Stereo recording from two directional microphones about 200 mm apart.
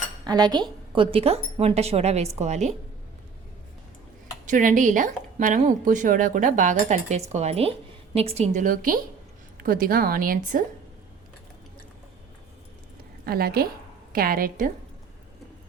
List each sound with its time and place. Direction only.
0.3 s a woman's voice: 20° right (ahead or behind)
4.4 s a woman's voice: 40° right (ahead or behind)
13.2 s a woman's voice: 50° right (ahead or behind)